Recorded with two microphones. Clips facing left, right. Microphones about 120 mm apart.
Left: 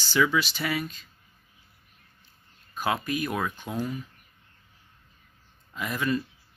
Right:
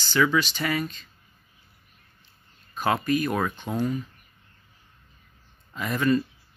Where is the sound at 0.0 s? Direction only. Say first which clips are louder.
Right 2 dB; 10° left (ahead or behind).